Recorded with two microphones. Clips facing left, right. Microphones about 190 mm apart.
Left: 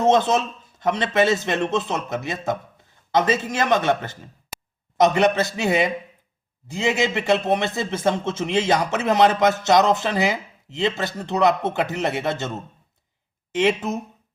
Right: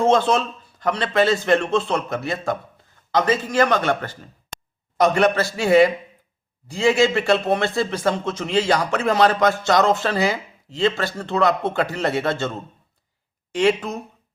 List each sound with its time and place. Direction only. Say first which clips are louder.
0.0 s a man's voice: even; 20° left (ahead or behind)
4.5 s a sound: even; 5° left (ahead or behind)
4.9 s a man's voice: even; 20° left (ahead or behind)